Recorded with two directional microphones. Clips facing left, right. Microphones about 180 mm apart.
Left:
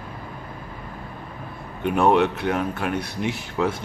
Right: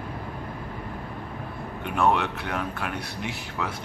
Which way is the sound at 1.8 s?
20° left (ahead or behind).